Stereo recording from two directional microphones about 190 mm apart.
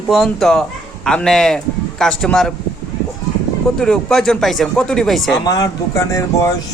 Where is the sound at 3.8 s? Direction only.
5° left (ahead or behind).